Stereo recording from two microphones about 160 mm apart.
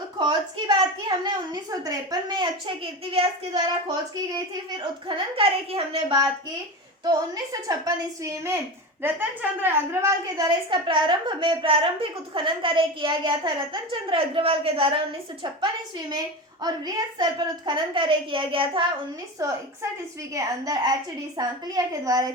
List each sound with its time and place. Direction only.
0.2 s a woman's voice: 30° right (ahead or behind)
7.0 s a woman's voice: 20° right (ahead or behind)
19.4 s a woman's voice: 20° right (ahead or behind)